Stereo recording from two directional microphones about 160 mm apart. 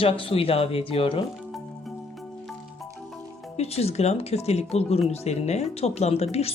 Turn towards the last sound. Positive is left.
turn(degrees=40)  # may be behind; listen again after turning